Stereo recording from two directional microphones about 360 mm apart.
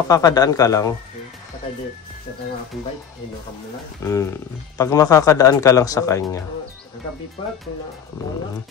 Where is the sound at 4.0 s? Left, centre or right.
Centre.